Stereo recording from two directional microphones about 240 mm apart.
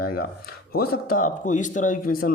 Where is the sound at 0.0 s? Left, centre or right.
Left.